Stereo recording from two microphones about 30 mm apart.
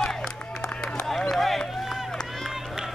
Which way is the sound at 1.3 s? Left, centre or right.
Centre.